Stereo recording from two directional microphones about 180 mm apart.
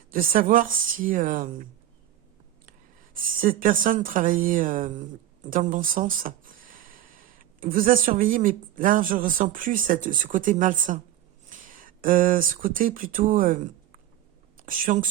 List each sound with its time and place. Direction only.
0.1 s speech: 50° right (ahead or behind)
3.2 s speech: 50° right (ahead or behind)